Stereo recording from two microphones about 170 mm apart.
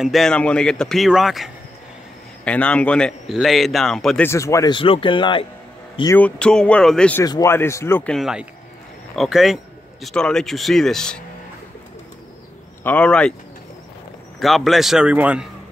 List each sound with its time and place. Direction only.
0.0 s speech: centre (ahead or behind)
4.3 s a man's voice: 15° left (ahead or behind)
6.1 s speech: 5° left (ahead or behind)
7.2 s speech: 20° left (ahead or behind)
12.8 s speech: 5° left (ahead or behind)
14.4 s speech: centre (ahead or behind)